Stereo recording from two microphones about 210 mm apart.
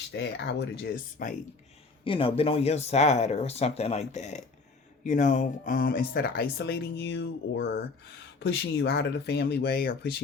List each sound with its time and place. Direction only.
0.1 s speech: 60° left (ahead or behind); by 1.4 s 40° left (ahead or behind)
2.0 s speech: 25° left (ahead or behind); by 10.2 s 45° left (ahead or behind)